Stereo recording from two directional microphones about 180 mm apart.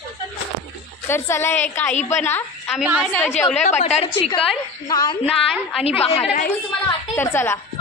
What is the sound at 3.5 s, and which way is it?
Speech, 40° left (ahead or behind).